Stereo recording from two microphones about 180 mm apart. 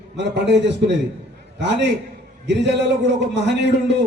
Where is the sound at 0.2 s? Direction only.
75° right (ahead or behind).